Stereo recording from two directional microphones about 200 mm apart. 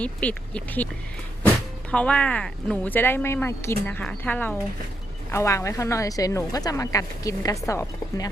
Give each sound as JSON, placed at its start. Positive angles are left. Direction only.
{"t": 0.0, "sound": "a woman's voice", "side_deg": 5}
{"t": 1.9, "sound": "a woman's voice", "side_deg": 5}